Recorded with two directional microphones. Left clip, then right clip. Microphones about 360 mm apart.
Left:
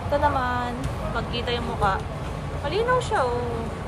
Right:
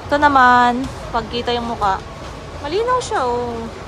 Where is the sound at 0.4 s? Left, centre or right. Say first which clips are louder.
Right 15 dB; right.